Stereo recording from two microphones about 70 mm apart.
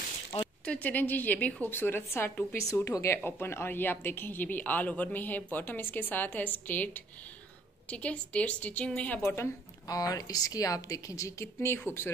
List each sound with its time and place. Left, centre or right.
0.7 s a woman's voice: left
2.5 s speech: left; by 9.2 s centre
9.2 s a woman's voice: left
9.8 s a woman's voice: left